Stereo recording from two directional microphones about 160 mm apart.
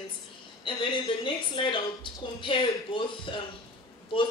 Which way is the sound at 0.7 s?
30° left (ahead or behind).